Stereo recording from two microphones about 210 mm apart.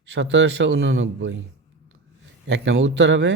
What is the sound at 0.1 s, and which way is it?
Speech, 60° right (ahead or behind).